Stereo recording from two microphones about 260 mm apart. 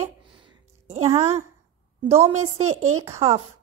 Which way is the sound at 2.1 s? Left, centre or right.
Right.